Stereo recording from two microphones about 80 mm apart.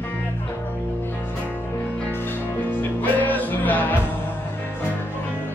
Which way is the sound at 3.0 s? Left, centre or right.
Left.